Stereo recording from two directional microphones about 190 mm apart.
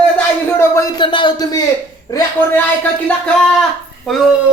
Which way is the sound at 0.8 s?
25° left (ahead or behind).